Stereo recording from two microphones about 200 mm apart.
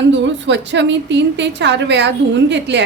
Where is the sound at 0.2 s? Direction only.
65° right (ahead or behind).